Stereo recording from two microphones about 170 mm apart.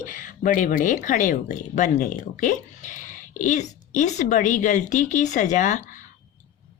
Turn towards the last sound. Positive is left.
turn(degrees=45)  # may be behind; listen again after turning